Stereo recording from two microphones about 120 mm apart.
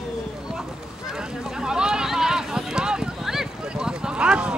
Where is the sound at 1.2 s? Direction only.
5° right (ahead or behind).